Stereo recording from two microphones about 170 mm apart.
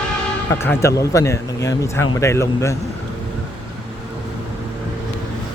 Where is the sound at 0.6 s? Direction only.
15° left (ahead or behind).